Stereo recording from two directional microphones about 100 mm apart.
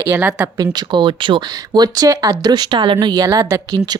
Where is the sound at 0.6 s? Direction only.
45° right (ahead or behind).